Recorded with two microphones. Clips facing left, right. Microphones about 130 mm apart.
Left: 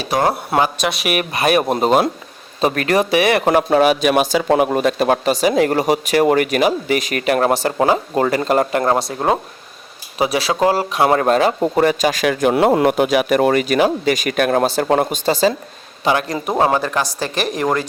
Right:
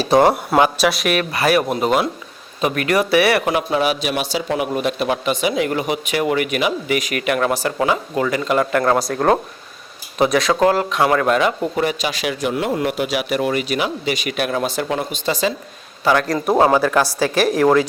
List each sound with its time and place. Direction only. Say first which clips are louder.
0.0 s speech: right 5 dB; 25° right (ahead or behind)
0.5 s speech: right 2 dB; centre (ahead or behind)
1.0 s speech: even; 20° left (ahead or behind)
1.6 s a man's voice: left 3 dB; 35° left (ahead or behind)
3.4 s a man's voice: left 5 dB; 45° left (ahead or behind)
8.8 s speech: even; 25° left (ahead or behind)
9.1 s speech: right 2 dB; 10° left (ahead or behind)
10.5 s speech: right 1 dB; 15° left (ahead or behind)
11.0 s a man's voice: left 3 dB; 30° left (ahead or behind)
15.3 s a man's voice: left 4 dB; 30° left (ahead or behind)
16.3 s speech: right 2 dB; centre (ahead or behind)